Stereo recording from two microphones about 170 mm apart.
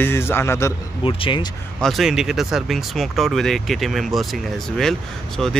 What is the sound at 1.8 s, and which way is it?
Speech, centre (ahead or behind).